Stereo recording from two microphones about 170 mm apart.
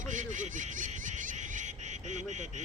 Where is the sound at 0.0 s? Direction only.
45° right (ahead or behind).